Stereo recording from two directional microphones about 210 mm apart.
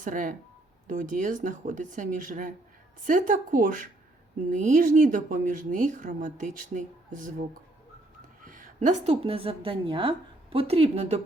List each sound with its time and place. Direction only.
0.0 s speech: 40° right (ahead or behind)
8.4 s a woman's voice: 40° right (ahead or behind)